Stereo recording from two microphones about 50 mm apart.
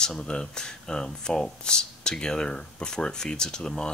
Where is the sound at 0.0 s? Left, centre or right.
Centre.